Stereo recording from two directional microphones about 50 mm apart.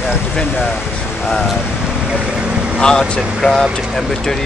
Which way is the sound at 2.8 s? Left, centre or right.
Centre.